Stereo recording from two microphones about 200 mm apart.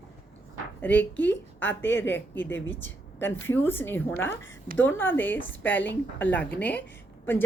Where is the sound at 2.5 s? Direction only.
70° left (ahead or behind).